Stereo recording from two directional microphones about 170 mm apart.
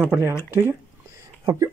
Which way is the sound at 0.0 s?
10° right (ahead or behind).